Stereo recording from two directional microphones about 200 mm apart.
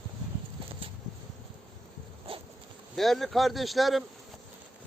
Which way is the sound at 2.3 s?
25° right (ahead or behind).